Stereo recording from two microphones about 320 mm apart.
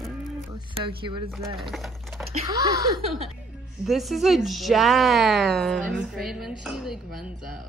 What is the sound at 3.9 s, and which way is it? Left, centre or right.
A woman's voice, centre.